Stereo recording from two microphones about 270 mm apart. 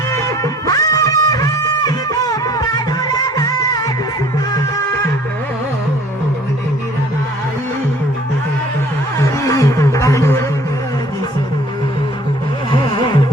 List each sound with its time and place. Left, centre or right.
0.1 s music: centre
9.1 s a sound: centre
12.8 s music: centre